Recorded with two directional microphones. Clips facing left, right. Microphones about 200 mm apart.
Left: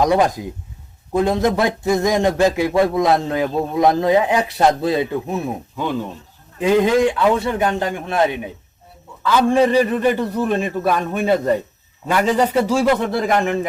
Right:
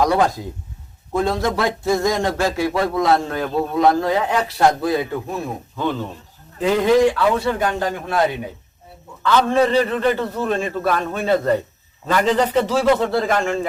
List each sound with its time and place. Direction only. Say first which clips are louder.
0.0 s a man's voice: left 1 dB; 20° left (ahead or behind)
9.2 s a man's voice: left 1 dB; 10° left (ahead or behind)